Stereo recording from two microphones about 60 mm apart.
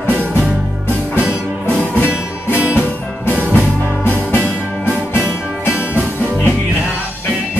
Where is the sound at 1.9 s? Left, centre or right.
Left.